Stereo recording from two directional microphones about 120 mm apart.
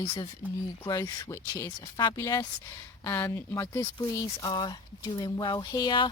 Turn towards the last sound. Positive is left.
turn(degrees=40)  # may be behind; listen again after turning